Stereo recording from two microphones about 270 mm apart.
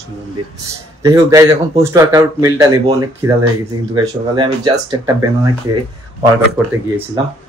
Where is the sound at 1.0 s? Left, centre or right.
Centre.